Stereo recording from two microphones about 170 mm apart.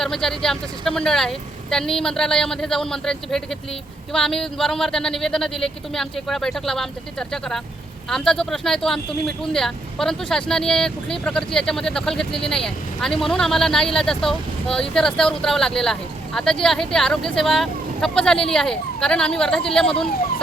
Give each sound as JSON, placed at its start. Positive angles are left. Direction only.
{"t": 0.0, "sound": "speech", "side_deg": 5}